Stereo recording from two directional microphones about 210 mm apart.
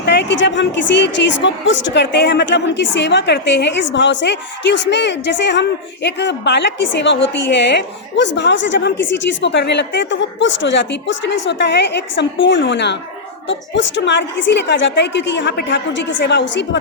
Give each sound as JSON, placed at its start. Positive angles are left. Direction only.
{"t": 0.0, "sound": "speech", "side_deg": 55}